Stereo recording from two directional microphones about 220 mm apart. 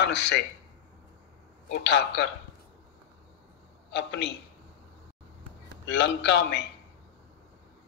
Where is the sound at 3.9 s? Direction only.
50° left (ahead or behind).